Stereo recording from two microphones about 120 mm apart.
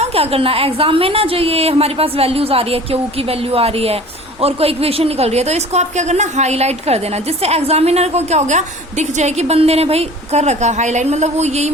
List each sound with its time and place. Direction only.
0.0 s a woman's voice: 55° right (ahead or behind)